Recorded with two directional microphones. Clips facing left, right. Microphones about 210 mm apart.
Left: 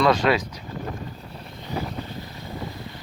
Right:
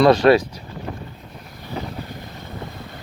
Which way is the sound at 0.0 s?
35° right (ahead or behind).